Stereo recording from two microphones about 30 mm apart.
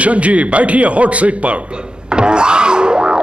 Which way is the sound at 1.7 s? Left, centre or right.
Right.